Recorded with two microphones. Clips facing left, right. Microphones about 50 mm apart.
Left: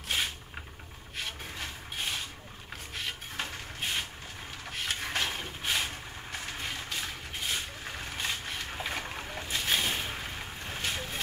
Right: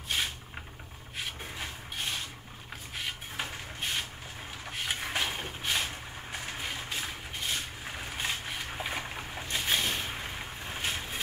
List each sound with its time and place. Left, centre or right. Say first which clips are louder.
1.1 s a sound: even; centre
4.6 s vehicle: even; centre
7.5 s boat: even; centre
10.9 s vehicle: left 1 dB; centre